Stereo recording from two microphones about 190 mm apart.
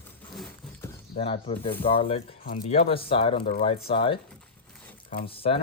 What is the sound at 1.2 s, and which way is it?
Speech, 30° left (ahead or behind).